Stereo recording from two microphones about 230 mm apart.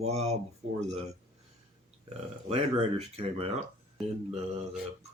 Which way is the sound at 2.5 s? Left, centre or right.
Right.